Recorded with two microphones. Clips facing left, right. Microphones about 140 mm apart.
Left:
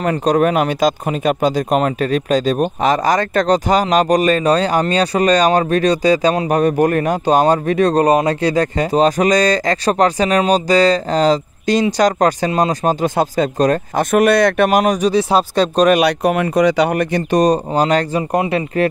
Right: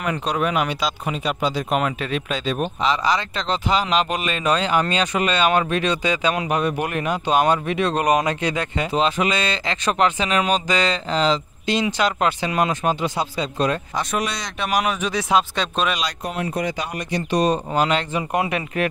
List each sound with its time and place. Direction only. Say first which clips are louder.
0.0 s speech: left 8 dB; 45° left (ahead or behind)
16.0 s speech: left 12 dB; 70° left (ahead or behind); by 18.9 s 30° left (ahead or behind)